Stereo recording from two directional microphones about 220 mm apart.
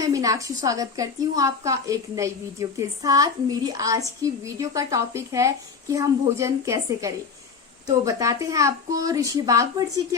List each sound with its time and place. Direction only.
0.0 s a woman's voice: 15° right (ahead or behind)